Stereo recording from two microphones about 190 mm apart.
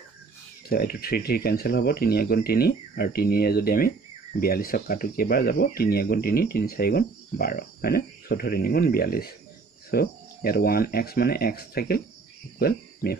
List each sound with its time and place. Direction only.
0.7 s speech: 55° left (ahead or behind)
12.5 s cricket: 55° left (ahead or behind)